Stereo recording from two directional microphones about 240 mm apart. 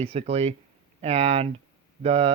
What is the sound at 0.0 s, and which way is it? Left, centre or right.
Speech, right.